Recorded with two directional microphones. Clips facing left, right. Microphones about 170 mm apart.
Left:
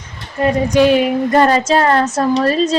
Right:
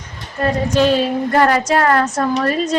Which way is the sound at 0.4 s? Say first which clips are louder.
Left 3 dB; 15° left (ahead or behind).